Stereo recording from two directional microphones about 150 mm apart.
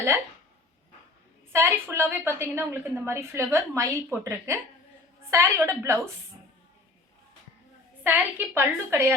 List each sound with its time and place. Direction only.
1.5 s a woman's voice: 15° right (ahead or behind)
8.0 s a woman's voice: 10° right (ahead or behind)